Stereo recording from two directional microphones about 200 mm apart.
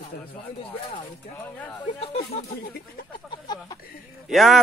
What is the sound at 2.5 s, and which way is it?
Speech, 55° left (ahead or behind).